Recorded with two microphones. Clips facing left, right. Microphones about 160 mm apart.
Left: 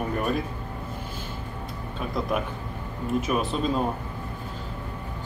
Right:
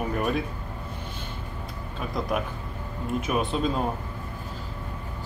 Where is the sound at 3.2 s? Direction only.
Centre (ahead or behind).